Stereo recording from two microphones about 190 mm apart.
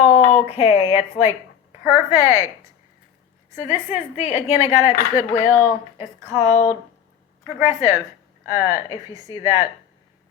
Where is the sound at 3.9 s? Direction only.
35° left (ahead or behind).